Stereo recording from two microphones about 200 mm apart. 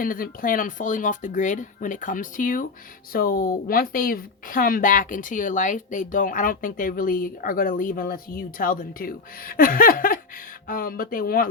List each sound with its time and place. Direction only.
0.0 s speech: 45° left (ahead or behind)